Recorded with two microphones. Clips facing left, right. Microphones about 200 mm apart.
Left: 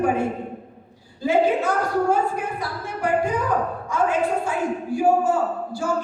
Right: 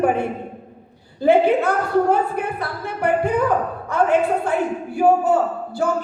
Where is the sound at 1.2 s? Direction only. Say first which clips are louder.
Right 4 dB; 60° right (ahead or behind).